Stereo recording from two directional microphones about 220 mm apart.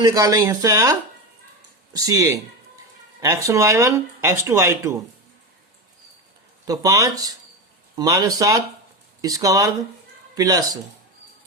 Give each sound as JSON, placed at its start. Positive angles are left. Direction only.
{"t": 0.0, "sound": "speech", "side_deg": -15}
{"t": 6.7, "sound": "speech", "side_deg": -15}